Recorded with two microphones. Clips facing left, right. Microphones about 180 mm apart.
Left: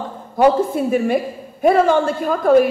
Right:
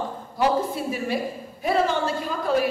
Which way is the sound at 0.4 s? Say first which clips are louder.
Left 8 dB; 50° left (ahead or behind).